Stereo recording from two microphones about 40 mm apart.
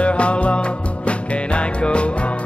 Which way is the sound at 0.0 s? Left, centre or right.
Left.